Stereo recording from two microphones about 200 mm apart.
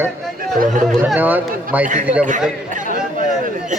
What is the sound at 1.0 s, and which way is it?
Speech, 10° right (ahead or behind).